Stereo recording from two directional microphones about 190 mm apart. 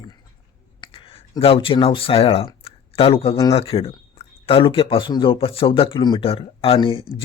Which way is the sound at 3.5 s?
30° left (ahead or behind).